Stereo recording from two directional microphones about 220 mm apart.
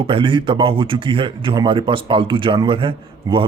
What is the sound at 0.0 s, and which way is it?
Speech, 25° right (ahead or behind).